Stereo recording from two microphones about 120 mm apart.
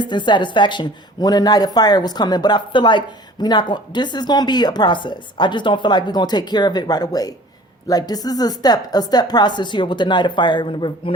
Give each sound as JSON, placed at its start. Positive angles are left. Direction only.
{"t": 0.0, "sound": "a woman's voice", "side_deg": 40}